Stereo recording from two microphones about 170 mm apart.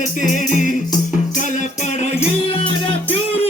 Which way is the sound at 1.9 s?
40° left (ahead or behind).